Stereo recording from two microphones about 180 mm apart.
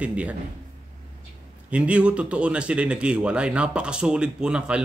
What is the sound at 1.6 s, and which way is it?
Speech, 5° right (ahead or behind).